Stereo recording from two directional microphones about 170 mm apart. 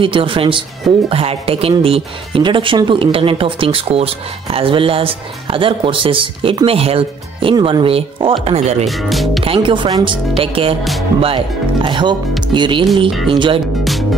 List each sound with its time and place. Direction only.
0.0 s speech: 30° right (ahead or behind)
8.8 s speech: centre (ahead or behind)
9.4 s speech: 30° right (ahead or behind)
10.8 s speech: centre (ahead or behind)
11.1 s speech: 30° right (ahead or behind)